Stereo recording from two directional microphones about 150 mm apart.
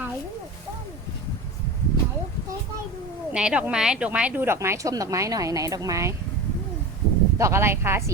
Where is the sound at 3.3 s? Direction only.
5° right (ahead or behind).